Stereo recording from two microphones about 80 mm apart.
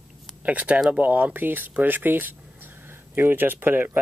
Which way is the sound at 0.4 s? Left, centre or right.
Centre.